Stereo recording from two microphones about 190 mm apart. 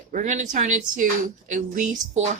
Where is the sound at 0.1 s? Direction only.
40° right (ahead or behind).